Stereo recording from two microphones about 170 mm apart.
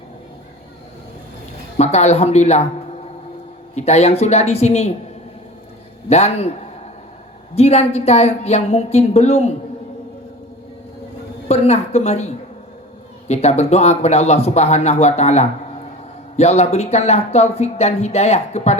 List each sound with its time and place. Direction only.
1.8 s speech: 40° left (ahead or behind)
3.8 s speech: 40° left (ahead or behind)
6.1 s speech: 40° left (ahead or behind)
7.5 s speech: 40° left (ahead or behind)
11.4 s a woman's voice: 40° left (ahead or behind)